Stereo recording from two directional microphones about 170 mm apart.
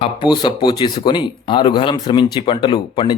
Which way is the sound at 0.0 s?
25° left (ahead or behind).